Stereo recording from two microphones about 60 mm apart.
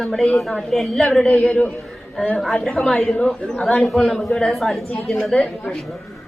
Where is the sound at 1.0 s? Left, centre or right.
Centre.